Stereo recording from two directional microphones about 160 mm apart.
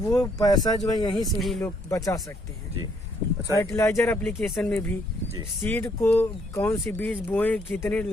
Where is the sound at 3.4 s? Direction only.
20° left (ahead or behind).